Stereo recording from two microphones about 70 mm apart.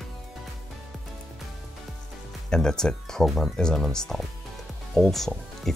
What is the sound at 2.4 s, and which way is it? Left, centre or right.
Speech, centre.